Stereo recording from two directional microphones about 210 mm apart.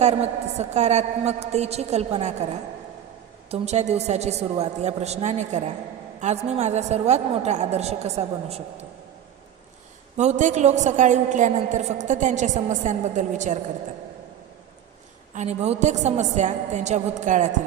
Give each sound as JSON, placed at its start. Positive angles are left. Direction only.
{"t": 0.0, "sound": "a woman's voice", "side_deg": -30}
{"t": 10.2, "sound": "a woman's voice", "side_deg": -35}
{"t": 15.4, "sound": "a woman's voice", "side_deg": -35}